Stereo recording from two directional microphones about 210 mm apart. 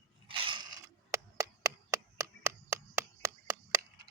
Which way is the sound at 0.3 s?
25° right (ahead or behind).